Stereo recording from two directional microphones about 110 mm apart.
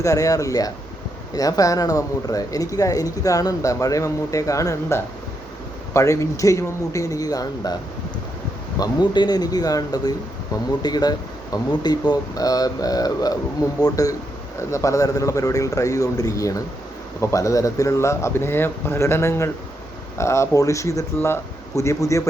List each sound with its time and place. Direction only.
0.0 s speech: 30° left (ahead or behind)
8.8 s speech: 40° left (ahead or behind)